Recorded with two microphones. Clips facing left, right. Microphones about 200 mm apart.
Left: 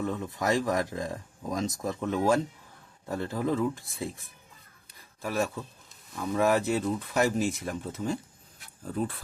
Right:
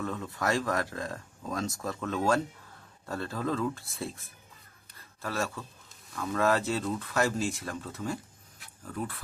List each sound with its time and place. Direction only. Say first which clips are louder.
0.0 s speech: left 2 dB; 15° left (ahead or behind)